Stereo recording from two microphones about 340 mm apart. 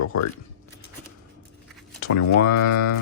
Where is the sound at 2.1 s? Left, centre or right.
Left.